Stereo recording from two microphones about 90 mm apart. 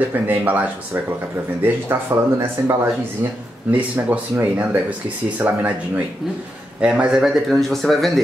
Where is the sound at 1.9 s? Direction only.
30° right (ahead or behind).